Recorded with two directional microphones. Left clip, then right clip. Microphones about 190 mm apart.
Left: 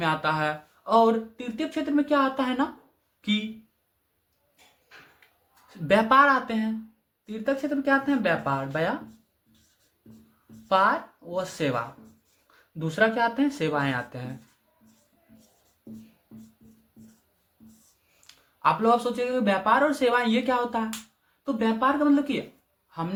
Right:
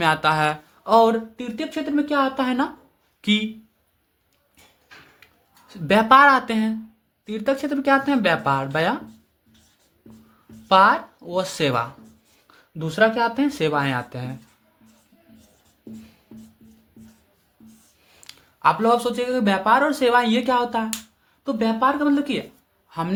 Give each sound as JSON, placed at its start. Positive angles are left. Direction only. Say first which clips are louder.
{"t": 0.0, "sound": "speech", "louder": "right 6 dB", "side_deg": -45}
{"t": 3.2, "sound": "speech", "louder": "right 7 dB", "side_deg": -40}
{"t": 5.6, "sound": "speech", "louder": "right 4 dB", "side_deg": -30}
{"t": 10.7, "sound": "speech", "louder": "right 7 dB", "side_deg": -40}
{"t": 18.3, "sound": "speech", "louder": "right 5 dB", "side_deg": -35}
{"t": 22.9, "sound": "speech", "louder": "right 6 dB", "side_deg": -45}